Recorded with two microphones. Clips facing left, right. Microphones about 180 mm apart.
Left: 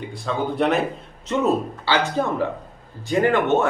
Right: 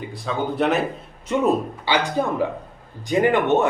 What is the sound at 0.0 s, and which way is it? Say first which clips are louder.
Speech: even; centre (ahead or behind).